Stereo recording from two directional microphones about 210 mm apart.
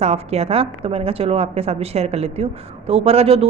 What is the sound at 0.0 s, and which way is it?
A woman's voice, 30° right (ahead or behind).